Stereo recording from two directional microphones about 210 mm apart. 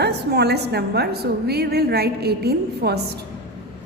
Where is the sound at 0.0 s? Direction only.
50° right (ahead or behind).